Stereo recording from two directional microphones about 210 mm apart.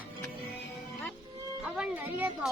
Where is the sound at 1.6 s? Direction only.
5° right (ahead or behind).